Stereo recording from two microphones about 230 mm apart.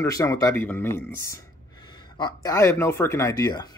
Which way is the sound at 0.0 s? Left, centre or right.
Centre.